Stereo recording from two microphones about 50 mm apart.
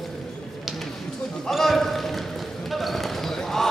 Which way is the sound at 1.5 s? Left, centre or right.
Centre.